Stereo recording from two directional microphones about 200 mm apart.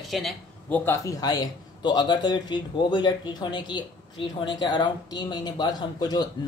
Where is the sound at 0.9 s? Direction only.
15° left (ahead or behind).